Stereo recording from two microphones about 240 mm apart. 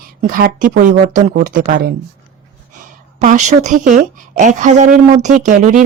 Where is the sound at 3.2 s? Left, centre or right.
Right.